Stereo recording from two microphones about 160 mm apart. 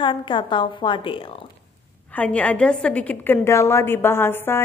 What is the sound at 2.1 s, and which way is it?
A woman's voice, 10° left (ahead or behind).